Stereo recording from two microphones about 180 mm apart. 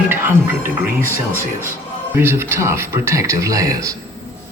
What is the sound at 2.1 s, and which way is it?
Speech, 15° right (ahead or behind).